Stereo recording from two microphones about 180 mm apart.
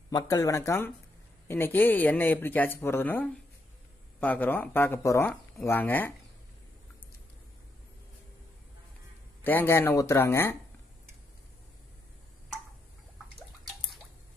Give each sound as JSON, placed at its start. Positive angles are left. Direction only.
{"t": 0.1, "sound": "speech", "side_deg": 20}
{"t": 9.4, "sound": "speech", "side_deg": 10}